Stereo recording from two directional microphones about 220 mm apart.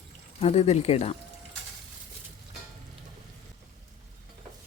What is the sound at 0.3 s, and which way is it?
Speech, 30° left (ahead or behind).